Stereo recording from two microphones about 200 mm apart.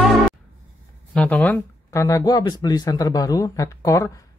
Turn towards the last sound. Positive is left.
turn(degrees=15)  # may be behind; listen again after turning